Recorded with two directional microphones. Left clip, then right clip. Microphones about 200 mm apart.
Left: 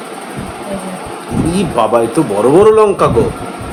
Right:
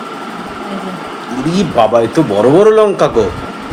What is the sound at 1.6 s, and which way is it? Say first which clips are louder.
A man's voice: right 2 dB; 5° left (ahead or behind).